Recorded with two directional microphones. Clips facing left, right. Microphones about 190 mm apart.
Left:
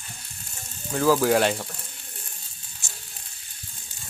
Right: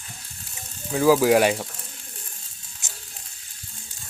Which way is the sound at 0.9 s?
5° right (ahead or behind).